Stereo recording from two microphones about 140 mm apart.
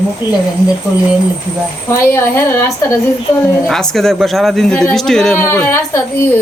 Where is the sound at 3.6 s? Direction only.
Centre (ahead or behind).